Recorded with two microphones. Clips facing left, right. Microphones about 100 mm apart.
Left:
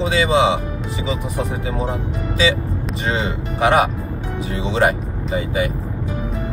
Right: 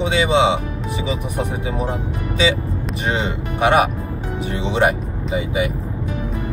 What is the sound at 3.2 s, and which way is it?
Speech, 20° right (ahead or behind).